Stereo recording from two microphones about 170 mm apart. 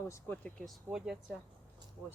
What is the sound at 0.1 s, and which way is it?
Speech, 10° left (ahead or behind).